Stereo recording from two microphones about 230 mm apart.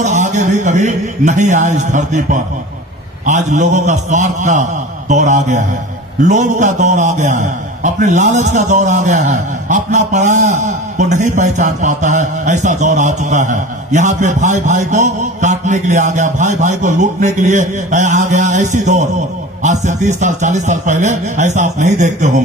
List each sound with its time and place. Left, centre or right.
0.0 s a man's voice: right